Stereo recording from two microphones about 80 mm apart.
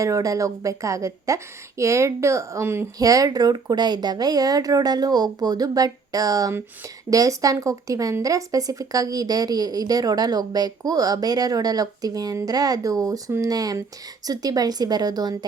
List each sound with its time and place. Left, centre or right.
0.0 s a woman's voice: right
3.0 s a woman's voice: right